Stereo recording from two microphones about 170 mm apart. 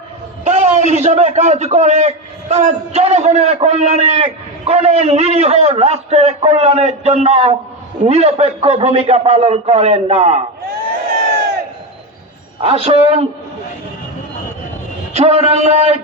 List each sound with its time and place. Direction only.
0.4 s a man's voice: 45° right (ahead or behind)
12.5 s a man's voice: 35° right (ahead or behind)
15.1 s a man's voice: 40° right (ahead or behind)